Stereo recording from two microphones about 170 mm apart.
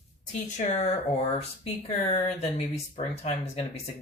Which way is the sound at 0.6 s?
50° left (ahead or behind).